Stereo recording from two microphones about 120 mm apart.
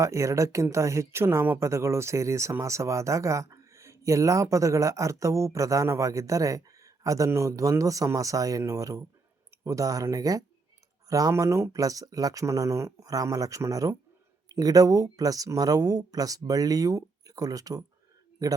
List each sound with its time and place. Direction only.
0.0 s speech: 25° right (ahead or behind)